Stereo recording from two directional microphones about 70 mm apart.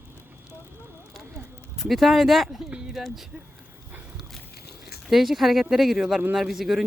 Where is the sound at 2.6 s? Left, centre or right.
Centre.